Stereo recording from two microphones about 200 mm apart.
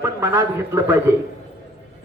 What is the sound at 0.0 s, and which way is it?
Speech, 15° right (ahead or behind).